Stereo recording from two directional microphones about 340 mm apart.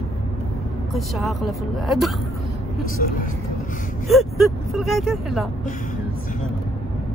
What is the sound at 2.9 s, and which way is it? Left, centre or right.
Speech, left.